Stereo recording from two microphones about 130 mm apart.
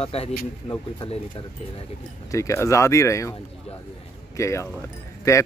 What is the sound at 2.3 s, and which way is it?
Speech, 25° left (ahead or behind).